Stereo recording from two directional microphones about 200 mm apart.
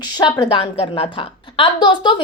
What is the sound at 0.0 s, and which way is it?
A woman's voice, 25° left (ahead or behind).